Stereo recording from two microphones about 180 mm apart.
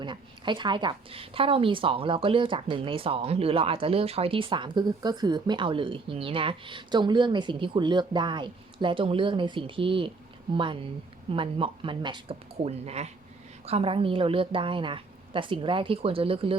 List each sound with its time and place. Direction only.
0.0 s a woman's voice: 25° right (ahead or behind)